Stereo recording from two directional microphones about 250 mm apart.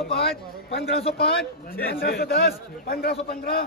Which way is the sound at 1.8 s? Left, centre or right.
Left.